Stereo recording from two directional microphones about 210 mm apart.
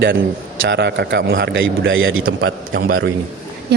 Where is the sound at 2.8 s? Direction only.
45° right (ahead or behind).